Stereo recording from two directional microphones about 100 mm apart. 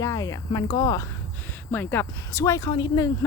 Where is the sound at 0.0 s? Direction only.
30° left (ahead or behind).